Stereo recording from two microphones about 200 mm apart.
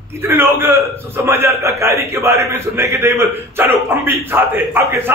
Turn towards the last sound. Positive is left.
turn(degrees=-10)  # may be behind; listen again after turning